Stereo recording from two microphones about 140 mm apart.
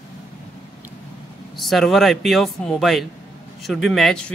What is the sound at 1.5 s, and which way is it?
Speech, centre (ahead or behind).